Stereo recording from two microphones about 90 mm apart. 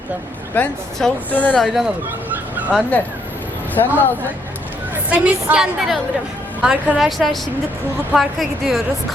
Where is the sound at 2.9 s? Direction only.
15° left (ahead or behind).